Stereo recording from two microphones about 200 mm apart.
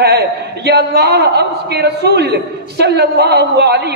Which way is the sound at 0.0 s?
55° right (ahead or behind).